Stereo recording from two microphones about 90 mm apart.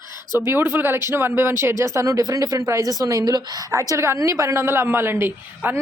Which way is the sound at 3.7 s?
35° right (ahead or behind).